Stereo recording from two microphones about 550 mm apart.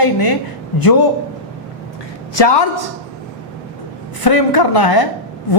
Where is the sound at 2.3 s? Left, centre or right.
Left.